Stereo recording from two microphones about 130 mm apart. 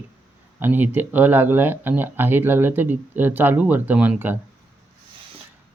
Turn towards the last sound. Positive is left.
turn(degrees=-15)  # may be behind; listen again after turning